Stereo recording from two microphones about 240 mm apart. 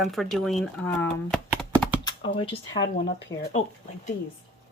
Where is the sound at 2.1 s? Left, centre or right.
Left.